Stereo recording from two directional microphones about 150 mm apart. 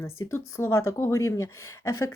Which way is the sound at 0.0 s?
15° left (ahead or behind).